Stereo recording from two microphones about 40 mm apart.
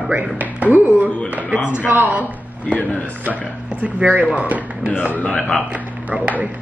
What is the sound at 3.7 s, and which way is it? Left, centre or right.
Speech, right.